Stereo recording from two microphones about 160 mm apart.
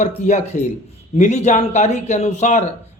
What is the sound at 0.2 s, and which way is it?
A man's voice, 45° left (ahead or behind).